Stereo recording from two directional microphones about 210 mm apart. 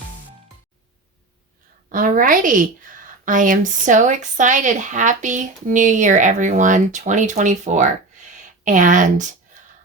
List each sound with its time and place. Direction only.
1.9 s speech: 40° right (ahead or behind)